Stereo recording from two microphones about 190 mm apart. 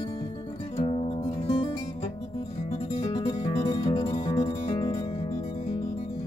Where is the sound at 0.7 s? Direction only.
30° left (ahead or behind).